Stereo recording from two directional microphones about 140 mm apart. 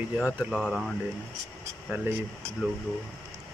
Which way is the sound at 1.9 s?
15° right (ahead or behind).